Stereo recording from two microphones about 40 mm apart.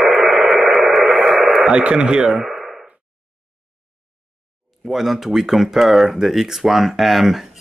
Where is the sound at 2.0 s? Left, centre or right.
Centre.